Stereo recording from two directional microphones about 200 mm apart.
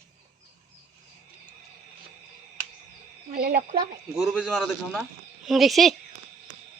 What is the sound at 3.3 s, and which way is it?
Speech, 50° right (ahead or behind).